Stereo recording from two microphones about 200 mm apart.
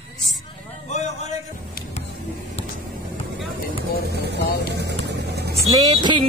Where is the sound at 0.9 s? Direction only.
35° left (ahead or behind).